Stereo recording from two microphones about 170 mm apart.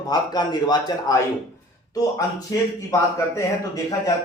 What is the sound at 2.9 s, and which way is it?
Speech, 15° left (ahead or behind).